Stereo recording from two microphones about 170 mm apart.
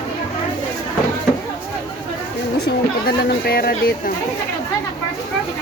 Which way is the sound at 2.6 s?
70° left (ahead or behind).